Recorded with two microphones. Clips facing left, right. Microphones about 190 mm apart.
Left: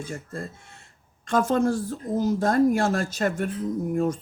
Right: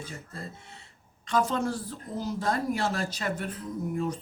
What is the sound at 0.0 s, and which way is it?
Speech, 50° left (ahead or behind).